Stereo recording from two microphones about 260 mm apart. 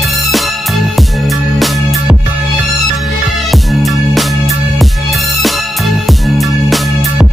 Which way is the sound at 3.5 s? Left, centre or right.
Centre.